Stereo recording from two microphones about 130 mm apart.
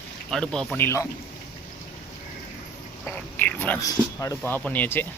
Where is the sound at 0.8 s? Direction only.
20° left (ahead or behind).